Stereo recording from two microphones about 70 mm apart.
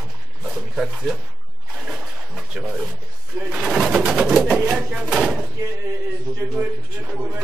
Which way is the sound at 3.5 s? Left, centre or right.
Centre.